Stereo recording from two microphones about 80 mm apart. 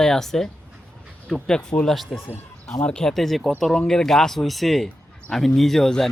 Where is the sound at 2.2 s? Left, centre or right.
Left.